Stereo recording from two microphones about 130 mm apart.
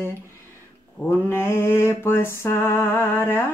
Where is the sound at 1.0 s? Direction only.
20° left (ahead or behind).